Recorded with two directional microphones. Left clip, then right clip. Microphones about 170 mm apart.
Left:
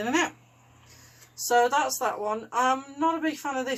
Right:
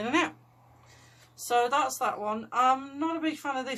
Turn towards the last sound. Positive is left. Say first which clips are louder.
# left 3 dB
turn(degrees=-20)  # may be behind; listen again after turning